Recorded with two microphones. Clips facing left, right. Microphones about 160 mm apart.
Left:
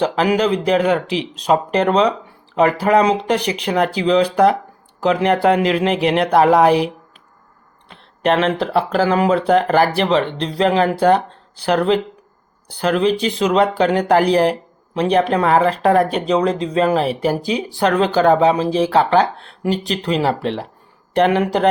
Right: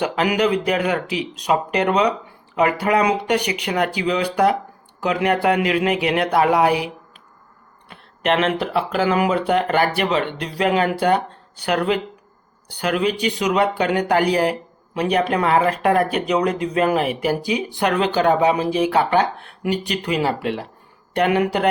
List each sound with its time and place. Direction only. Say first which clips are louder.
0.0 s speech: left 3 dB; 30° left (ahead or behind)
8.2 s speech: left 3 dB; 35° left (ahead or behind)
18.3 s speech: left 3 dB; 25° left (ahead or behind)